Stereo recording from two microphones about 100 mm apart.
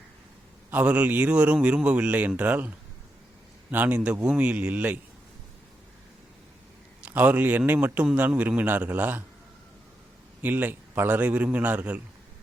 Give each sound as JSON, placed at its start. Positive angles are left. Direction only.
{"t": 0.7, "sound": "a man's voice", "side_deg": -15}
{"t": 7.0, "sound": "a man's voice", "side_deg": -15}
{"t": 10.4, "sound": "a man's voice", "side_deg": -20}